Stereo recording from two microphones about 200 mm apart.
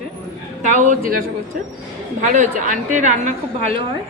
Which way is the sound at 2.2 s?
40° right (ahead or behind).